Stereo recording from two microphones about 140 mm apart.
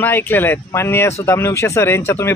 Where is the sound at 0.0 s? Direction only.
15° left (ahead or behind).